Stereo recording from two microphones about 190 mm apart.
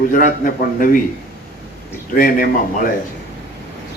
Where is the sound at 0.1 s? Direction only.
45° left (ahead or behind).